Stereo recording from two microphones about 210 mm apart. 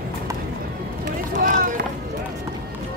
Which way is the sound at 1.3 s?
40° right (ahead or behind).